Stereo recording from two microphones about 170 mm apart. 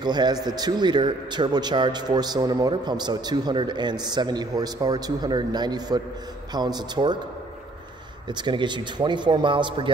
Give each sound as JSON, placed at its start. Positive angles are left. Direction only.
{"t": 0.0, "sound": "a man's voice", "side_deg": -25}
{"t": 8.3, "sound": "a man's voice", "side_deg": -25}